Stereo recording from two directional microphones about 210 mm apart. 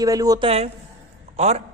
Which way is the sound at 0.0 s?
15° right (ahead or behind).